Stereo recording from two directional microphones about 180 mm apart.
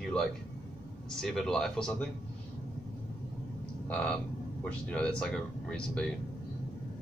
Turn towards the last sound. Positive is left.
turn(degrees=5)  # may be behind; listen again after turning